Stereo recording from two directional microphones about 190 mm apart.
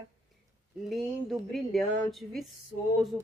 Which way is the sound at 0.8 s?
Centre (ahead or behind).